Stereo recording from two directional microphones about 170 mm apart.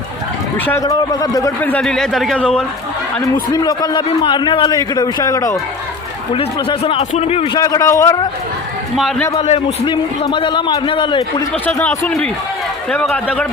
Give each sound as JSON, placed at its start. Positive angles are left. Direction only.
{"t": 0.6, "sound": "a man's voice", "side_deg": 15}
{"t": 1.7, "sound": "speech", "side_deg": 5}
{"t": 3.5, "sound": "a man's voice", "side_deg": 25}
{"t": 6.3, "sound": "a man's voice", "side_deg": 35}
{"t": 9.0, "sound": "speech", "side_deg": 0}
{"t": 9.4, "sound": "a man's voice", "side_deg": 35}
{"t": 11.6, "sound": "speech", "side_deg": 10}